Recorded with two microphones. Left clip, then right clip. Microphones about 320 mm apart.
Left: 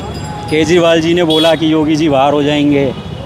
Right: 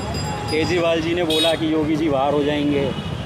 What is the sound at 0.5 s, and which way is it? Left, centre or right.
Speech, left.